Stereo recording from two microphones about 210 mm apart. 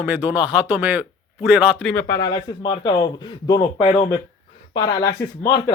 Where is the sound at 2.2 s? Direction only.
20° left (ahead or behind).